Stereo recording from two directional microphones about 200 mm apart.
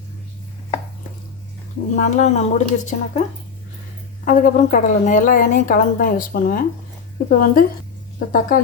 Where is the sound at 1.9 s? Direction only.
35° left (ahead or behind).